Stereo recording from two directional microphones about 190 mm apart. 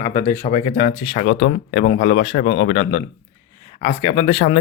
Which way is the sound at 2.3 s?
50° left (ahead or behind).